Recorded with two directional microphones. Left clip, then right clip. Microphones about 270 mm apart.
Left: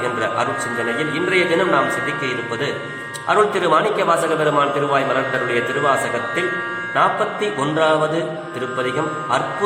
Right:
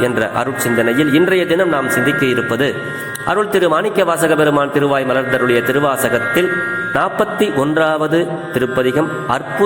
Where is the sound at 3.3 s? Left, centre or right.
Right.